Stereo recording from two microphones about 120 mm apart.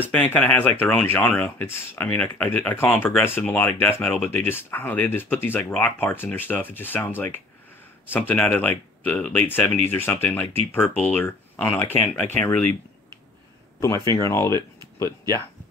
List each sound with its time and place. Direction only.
0.0 s speech: 10° left (ahead or behind)
14.0 s speech: 25° left (ahead or behind)